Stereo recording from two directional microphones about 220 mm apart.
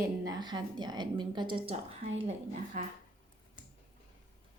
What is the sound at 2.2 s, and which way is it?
Speech, 35° right (ahead or behind).